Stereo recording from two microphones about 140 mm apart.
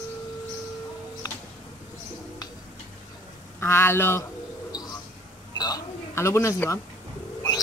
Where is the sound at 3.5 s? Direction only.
15° left (ahead or behind).